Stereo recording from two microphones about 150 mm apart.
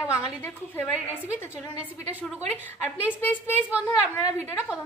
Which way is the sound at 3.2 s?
15° left (ahead or behind).